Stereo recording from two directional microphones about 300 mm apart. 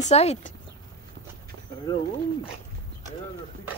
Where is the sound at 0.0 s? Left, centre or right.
Left.